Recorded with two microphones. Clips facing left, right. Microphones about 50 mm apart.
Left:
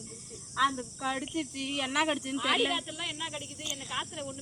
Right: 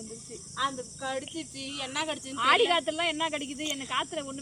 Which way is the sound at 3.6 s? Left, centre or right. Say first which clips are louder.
Right 3 dB; right.